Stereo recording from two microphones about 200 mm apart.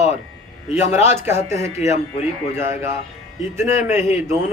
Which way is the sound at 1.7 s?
35° left (ahead or behind).